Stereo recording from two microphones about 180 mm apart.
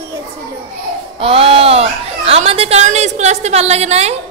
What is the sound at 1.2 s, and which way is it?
Speech, 30° right (ahead or behind).